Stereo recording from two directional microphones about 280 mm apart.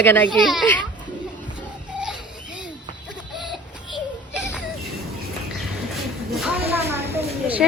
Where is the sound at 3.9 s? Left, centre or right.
Centre.